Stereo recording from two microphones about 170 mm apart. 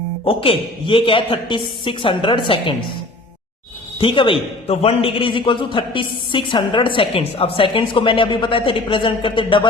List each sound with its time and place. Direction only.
0.3 s a man's voice: 30° left (ahead or behind)
3.9 s a man's voice: 30° left (ahead or behind)